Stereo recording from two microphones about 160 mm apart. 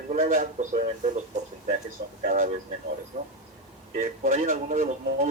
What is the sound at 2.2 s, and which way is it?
Speech, 60° right (ahead or behind).